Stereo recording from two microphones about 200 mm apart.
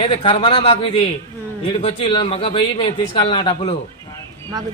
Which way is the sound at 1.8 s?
30° left (ahead or behind).